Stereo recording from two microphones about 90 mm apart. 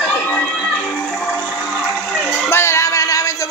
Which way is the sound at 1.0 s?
10° left (ahead or behind).